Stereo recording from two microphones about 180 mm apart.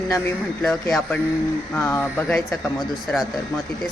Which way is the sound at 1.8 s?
10° left (ahead or behind).